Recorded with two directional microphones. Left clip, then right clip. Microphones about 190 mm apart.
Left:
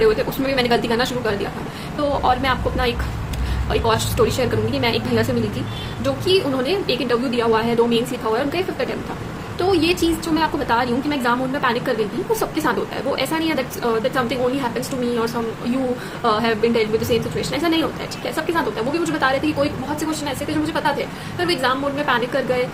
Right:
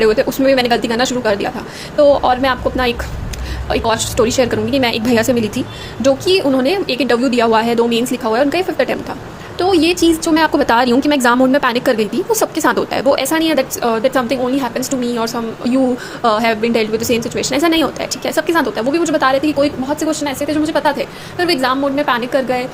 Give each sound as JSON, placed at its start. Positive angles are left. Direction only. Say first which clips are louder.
{"t": 0.0, "sound": "a woman's voice", "louder": "right 5 dB", "side_deg": -35}